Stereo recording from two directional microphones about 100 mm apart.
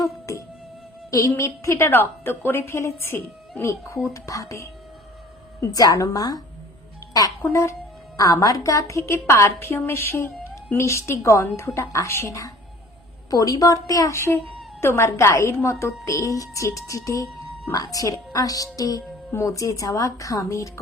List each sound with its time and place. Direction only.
0.0 s music: 35° left (ahead or behind)
1.4 s a woman's voice: 30° left (ahead or behind)
7.5 s a woman's voice: 30° left (ahead or behind)